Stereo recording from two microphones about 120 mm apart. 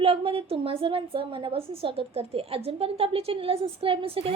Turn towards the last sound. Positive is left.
turn(degrees=-50)  # may be behind; listen again after turning